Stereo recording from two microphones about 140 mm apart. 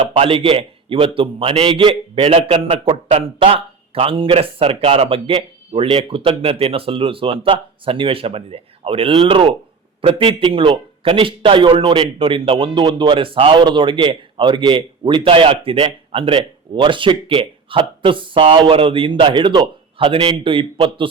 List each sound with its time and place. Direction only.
0.0 s a man's voice: 35° right (ahead or behind)